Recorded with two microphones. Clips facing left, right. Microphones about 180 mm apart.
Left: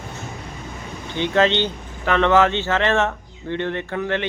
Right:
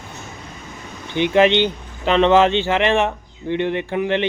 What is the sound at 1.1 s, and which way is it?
A man's voice, 15° right (ahead or behind).